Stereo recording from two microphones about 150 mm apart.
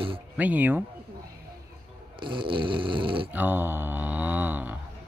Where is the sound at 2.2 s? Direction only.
35° right (ahead or behind).